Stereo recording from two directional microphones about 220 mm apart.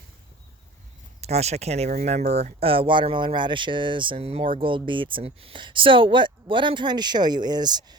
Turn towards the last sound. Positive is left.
turn(degrees=-20)  # may be behind; listen again after turning